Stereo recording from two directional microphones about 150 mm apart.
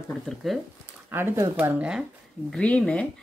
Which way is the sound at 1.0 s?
15° right (ahead or behind).